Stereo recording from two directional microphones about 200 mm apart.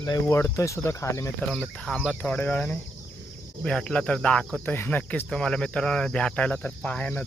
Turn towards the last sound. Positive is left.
turn(degrees=5)  # may be behind; listen again after turning